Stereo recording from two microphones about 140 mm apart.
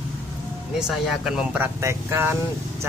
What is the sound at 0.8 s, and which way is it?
Speech, 5° right (ahead or behind).